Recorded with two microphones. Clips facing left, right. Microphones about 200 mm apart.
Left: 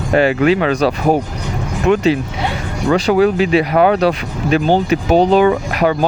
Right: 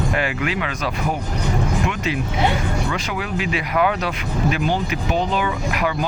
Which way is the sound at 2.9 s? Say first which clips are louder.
Left 13 dB; 35° left (ahead or behind).